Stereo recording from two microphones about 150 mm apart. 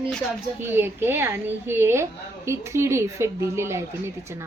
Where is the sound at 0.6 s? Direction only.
15° right (ahead or behind).